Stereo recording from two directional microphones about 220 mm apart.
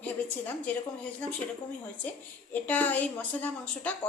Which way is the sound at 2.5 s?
5° left (ahead or behind).